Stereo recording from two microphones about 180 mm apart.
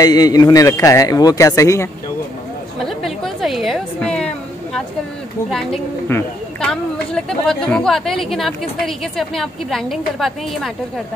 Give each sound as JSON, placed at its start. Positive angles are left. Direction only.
{"t": 0.0, "sound": "speech", "side_deg": 20}
{"t": 2.8, "sound": "music", "side_deg": 0}
{"t": 5.5, "sound": "speech", "side_deg": 0}